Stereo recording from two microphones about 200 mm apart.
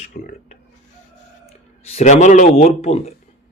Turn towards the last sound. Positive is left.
turn(degrees=30)  # may be behind; listen again after turning